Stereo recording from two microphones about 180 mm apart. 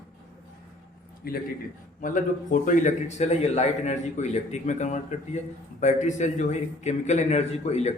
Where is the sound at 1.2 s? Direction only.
55° left (ahead or behind).